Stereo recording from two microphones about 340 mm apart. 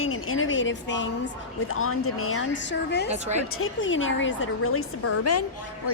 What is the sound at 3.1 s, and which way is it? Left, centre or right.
Speech, centre.